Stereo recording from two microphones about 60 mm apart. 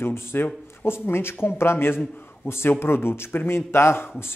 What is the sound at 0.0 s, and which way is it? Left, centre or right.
Speech, left.